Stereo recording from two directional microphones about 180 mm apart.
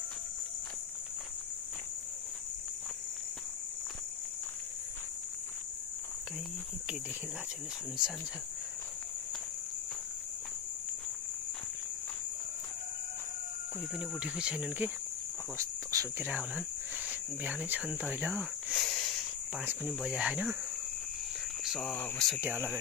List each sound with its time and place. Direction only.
13.9 s speech: 5° right (ahead or behind)
15.5 s cricket: 15° right (ahead or behind)
16.3 s speech: 5° right (ahead or behind)
19.5 s cricket: 10° right (ahead or behind)
19.9 s speech: 5° right (ahead or behind)
21.6 s speech: 5° left (ahead or behind)